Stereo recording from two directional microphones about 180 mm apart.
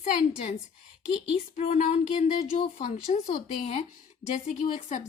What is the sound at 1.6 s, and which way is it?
A woman's voice, 35° left (ahead or behind).